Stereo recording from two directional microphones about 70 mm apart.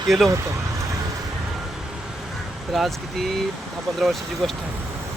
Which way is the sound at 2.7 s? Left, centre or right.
Centre.